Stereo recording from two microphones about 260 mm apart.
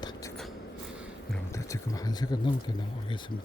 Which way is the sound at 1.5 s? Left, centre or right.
Centre.